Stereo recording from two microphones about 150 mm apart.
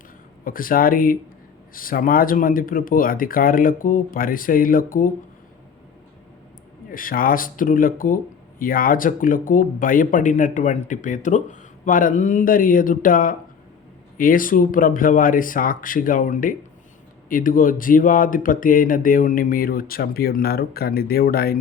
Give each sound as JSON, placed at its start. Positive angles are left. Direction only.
{"t": 0.4, "sound": "speech", "side_deg": 70}
{"t": 6.9, "sound": "speech", "side_deg": 70}